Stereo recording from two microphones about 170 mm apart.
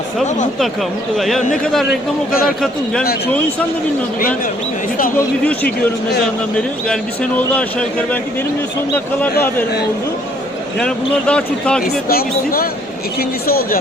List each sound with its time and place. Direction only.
0.6 s speech: centre (ahead or behind)
6.6 s a man's voice: 5° left (ahead or behind)
9.2 s a man's voice: 10° left (ahead or behind)
10.8 s speech: 5° left (ahead or behind)
11.8 s speech: 60° left (ahead or behind)